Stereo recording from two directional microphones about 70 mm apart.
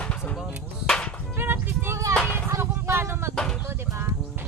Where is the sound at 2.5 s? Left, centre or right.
Right.